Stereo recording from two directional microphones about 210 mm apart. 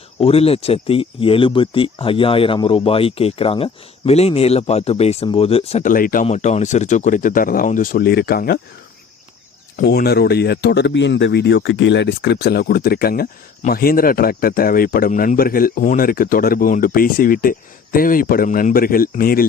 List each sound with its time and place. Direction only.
0.2 s speech: 30° left (ahead or behind); by 8.5 s 45° left (ahead or behind)
9.8 s speech: 50° left (ahead or behind)